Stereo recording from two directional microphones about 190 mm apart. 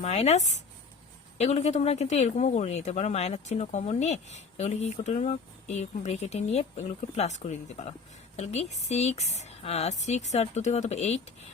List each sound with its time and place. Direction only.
0.0 s speech: 35° left (ahead or behind)